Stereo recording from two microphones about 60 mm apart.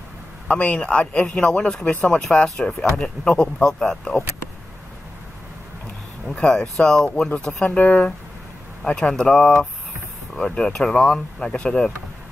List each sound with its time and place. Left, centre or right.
0.5 s speech: centre
6.2 s speech: centre